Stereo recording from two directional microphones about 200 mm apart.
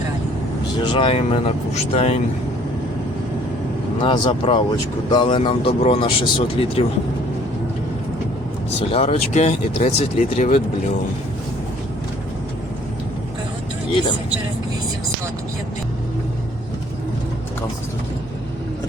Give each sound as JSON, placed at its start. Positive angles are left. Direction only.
{"t": 0.9, "sound": "speech", "side_deg": 25}
{"t": 4.0, "sound": "speech", "side_deg": 25}
{"t": 8.9, "sound": "speech", "side_deg": 30}